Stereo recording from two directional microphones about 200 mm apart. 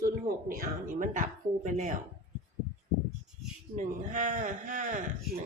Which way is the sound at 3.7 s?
40° right (ahead or behind).